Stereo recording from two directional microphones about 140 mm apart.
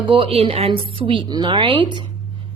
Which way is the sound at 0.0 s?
40° right (ahead or behind).